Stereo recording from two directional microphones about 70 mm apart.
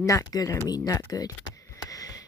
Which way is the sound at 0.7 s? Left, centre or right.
Left.